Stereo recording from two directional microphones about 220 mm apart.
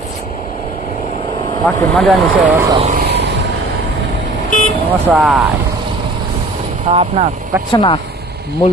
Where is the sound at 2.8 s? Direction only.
30° right (ahead or behind).